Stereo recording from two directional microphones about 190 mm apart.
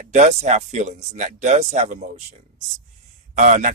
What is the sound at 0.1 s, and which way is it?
Speech, 40° right (ahead or behind).